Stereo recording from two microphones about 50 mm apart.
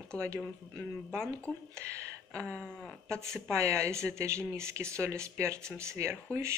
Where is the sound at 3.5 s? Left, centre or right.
Right.